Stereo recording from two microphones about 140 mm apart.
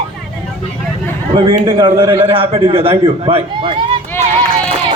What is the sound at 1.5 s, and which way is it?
A man's voice, 35° right (ahead or behind).